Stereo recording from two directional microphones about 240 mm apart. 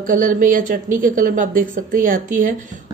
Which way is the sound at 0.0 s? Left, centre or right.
Right.